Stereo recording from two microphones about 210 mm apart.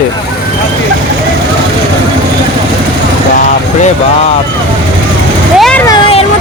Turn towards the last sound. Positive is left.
turn(degrees=5)  # may be behind; listen again after turning